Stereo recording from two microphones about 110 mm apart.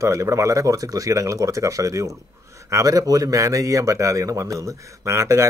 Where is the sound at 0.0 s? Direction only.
30° right (ahead or behind).